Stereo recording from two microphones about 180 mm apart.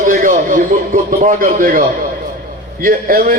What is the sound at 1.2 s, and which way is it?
Speech, 45° right (ahead or behind).